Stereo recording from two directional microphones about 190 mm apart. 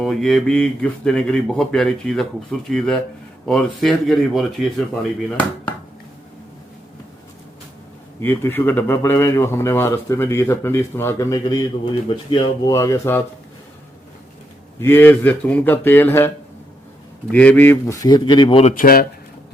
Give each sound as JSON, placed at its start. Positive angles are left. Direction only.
{"t": 0.0, "sound": "speech", "side_deg": 0}
{"t": 8.2, "sound": "a man's voice", "side_deg": 10}
{"t": 14.8, "sound": "a man's voice", "side_deg": 10}
{"t": 17.3, "sound": "a man's voice", "side_deg": 10}
{"t": 18.6, "sound": "speech", "side_deg": 45}